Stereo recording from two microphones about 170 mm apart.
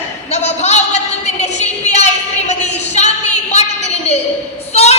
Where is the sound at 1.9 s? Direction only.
40° left (ahead or behind).